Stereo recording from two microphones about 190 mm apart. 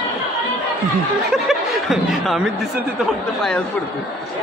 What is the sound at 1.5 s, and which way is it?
Speech, centre (ahead or behind).